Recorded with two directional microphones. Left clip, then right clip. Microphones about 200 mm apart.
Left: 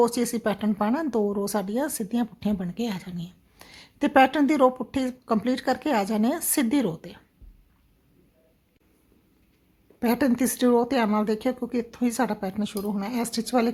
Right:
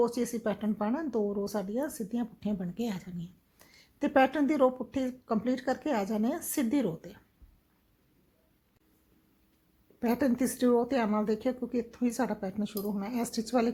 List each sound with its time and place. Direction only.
0.0 s speech: 15° left (ahead or behind)
10.0 s speech: 10° left (ahead or behind)